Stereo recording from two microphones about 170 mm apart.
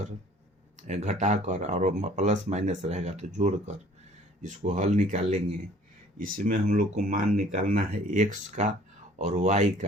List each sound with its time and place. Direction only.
0.8 s speech: 45° right (ahead or behind)